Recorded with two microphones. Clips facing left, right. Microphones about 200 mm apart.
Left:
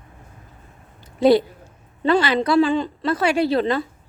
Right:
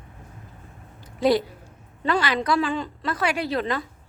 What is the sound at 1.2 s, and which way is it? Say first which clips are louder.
A woman's voice: left 5 dB; 25° left (ahead or behind).